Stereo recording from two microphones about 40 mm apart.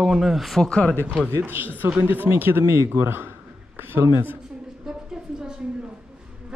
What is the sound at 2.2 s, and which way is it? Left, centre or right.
Speech, right.